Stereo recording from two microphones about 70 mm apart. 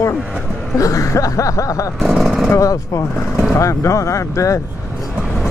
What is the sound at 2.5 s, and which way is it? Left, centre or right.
Speech, left.